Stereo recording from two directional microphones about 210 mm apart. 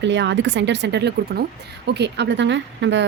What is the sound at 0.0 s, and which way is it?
Speech, 55° right (ahead or behind).